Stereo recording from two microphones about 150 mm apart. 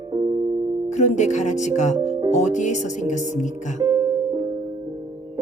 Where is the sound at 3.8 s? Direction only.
25° right (ahead or behind).